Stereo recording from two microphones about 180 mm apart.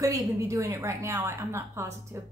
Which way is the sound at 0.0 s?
20° right (ahead or behind).